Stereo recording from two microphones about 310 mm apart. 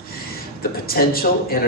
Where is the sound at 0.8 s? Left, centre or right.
Left.